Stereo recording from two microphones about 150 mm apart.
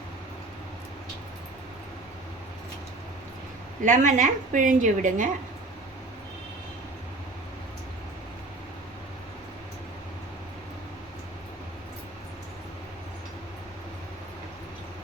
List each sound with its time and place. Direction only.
3.8 s a woman's voice: 60° right (ahead or behind)